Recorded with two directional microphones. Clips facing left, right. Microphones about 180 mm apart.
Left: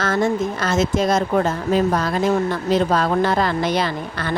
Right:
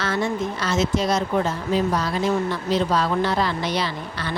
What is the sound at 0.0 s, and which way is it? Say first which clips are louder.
A woman's voice: left 4 dB; 45° left (ahead or behind).